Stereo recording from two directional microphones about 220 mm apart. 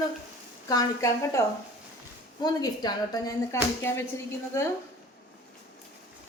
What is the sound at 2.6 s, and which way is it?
A woman's voice, 15° left (ahead or behind).